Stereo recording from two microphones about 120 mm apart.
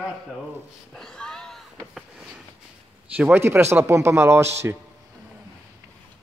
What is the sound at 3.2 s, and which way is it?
Speech, 20° right (ahead or behind).